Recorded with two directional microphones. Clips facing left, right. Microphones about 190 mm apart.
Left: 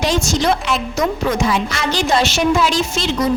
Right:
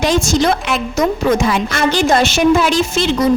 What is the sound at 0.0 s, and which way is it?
A woman's voice, 50° right (ahead or behind).